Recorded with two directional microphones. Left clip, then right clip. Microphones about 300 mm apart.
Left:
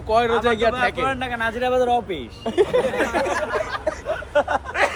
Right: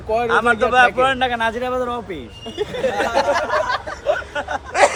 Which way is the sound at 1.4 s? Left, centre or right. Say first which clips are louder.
Even; centre.